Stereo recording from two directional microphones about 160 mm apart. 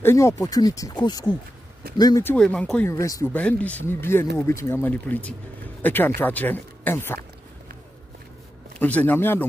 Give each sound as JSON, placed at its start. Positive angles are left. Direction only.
{"t": 0.0, "sound": "speech", "side_deg": 15}
{"t": 2.2, "sound": "speech", "side_deg": 5}
{"t": 2.9, "sound": "speech", "side_deg": 20}
{"t": 3.3, "sound": "speech", "side_deg": 10}
{"t": 8.7, "sound": "speech", "side_deg": 10}